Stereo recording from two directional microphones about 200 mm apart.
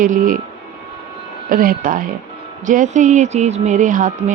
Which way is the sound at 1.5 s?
45° right (ahead or behind).